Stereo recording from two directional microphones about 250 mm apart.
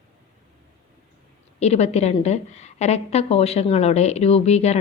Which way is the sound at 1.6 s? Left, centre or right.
Left.